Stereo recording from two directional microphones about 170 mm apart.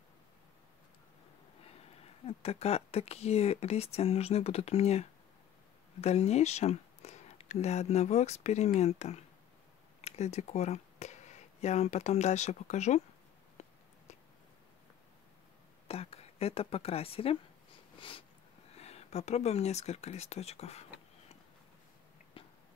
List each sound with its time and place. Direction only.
2.2 s speech: 35° left (ahead or behind)
15.9 s speech: 35° left (ahead or behind)
18.0 s sniff: 30° left (ahead or behind)
18.7 s speech: 40° left (ahead or behind)